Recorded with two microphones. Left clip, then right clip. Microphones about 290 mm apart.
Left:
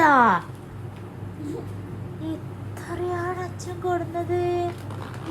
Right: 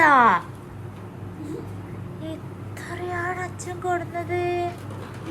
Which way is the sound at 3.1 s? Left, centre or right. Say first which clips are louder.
Right 4 dB; centre.